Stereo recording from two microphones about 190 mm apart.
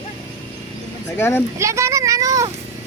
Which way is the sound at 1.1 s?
10° left (ahead or behind).